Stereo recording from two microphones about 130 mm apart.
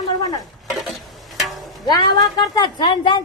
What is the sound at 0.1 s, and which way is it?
Stir, 30° left (ahead or behind).